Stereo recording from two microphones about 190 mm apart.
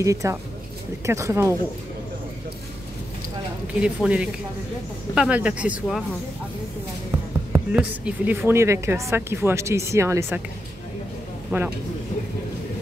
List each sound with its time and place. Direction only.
0.0 s speech: 15° right (ahead or behind)
3.8 s speech: 5° right (ahead or behind)
7.1 s speech: 10° right (ahead or behind)
11.5 s speech: 10° right (ahead or behind)